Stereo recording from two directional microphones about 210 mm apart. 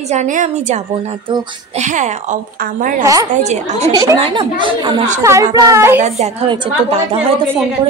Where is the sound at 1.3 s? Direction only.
20° right (ahead or behind).